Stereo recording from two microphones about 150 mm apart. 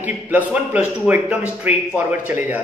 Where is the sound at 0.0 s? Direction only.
10° right (ahead or behind).